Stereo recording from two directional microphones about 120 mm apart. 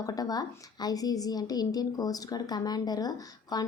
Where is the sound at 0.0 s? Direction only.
30° left (ahead or behind).